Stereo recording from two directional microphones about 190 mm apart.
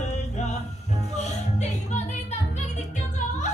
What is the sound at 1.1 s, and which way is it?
Music, 35° left (ahead or behind).